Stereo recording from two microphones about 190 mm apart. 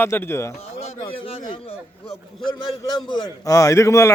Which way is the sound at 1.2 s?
30° left (ahead or behind).